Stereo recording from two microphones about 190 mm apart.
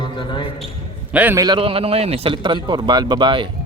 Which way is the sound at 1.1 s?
10° right (ahead or behind).